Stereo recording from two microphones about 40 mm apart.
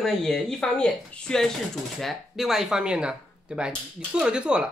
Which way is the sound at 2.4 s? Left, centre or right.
Centre.